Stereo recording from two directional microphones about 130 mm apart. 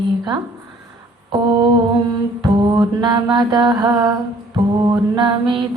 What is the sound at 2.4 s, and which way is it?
Mantra, 30° right (ahead or behind).